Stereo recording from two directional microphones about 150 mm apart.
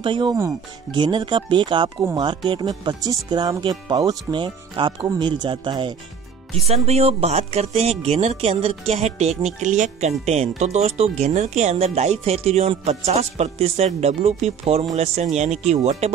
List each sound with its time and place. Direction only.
0.0 s speech: 30° right (ahead or behind)
6.5 s speech: 45° right (ahead or behind)